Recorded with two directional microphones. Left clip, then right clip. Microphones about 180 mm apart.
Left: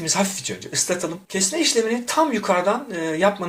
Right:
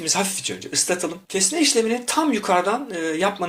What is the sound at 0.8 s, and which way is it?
Speech, 35° right (ahead or behind).